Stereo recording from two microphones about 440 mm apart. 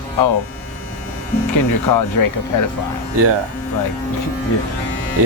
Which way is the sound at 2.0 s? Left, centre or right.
Left.